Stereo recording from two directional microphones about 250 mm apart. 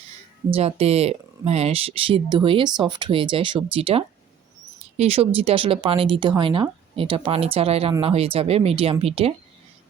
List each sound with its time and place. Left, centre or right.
0.5 s speech: right